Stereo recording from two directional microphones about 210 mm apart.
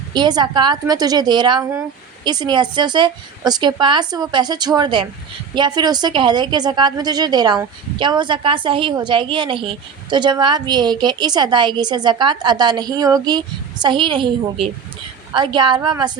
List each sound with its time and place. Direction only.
0.1 s a woman's voice: 20° right (ahead or behind)